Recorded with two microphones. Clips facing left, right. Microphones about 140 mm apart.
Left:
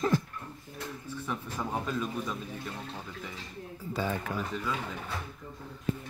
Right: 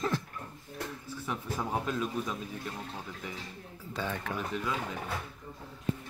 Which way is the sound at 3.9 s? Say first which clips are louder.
Left 2 dB; 5° left (ahead or behind).